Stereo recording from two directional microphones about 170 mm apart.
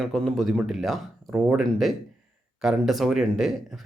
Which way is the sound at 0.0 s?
Centre (ahead or behind).